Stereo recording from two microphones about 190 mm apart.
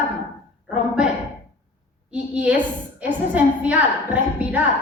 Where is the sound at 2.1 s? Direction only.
5° right (ahead or behind).